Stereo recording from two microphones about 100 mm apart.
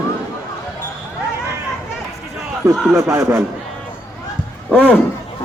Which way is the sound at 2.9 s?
30° right (ahead or behind).